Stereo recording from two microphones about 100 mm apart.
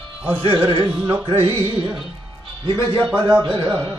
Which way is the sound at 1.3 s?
65° right (ahead or behind).